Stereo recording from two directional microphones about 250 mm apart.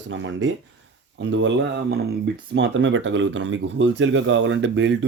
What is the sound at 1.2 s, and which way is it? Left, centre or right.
Speech, right.